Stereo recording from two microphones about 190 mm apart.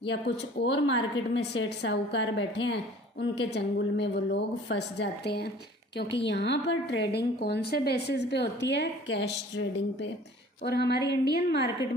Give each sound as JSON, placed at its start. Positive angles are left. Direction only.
{"t": 0.1, "sound": "a woman's voice", "side_deg": 65}